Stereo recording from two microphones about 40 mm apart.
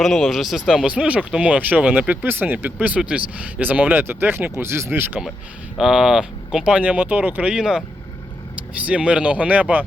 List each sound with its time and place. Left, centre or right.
0.0 s speech: centre
0.9 s speech: right
1.9 s speech: right
5.9 s speech: centre
6.8 s speech: right
7.5 s speech: centre
8.9 s speech: right